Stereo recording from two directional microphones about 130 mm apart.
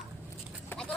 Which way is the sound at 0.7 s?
15° left (ahead or behind).